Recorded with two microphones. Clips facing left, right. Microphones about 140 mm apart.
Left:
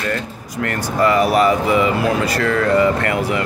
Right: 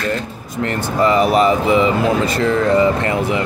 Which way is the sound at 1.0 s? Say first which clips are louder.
Right 1 dB; 20° right (ahead or behind).